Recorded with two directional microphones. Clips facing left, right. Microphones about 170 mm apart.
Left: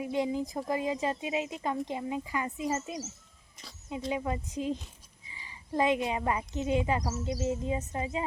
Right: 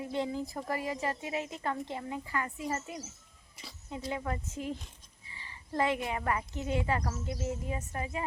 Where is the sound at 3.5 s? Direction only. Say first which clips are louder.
Right 1 dB; 5° right (ahead or behind).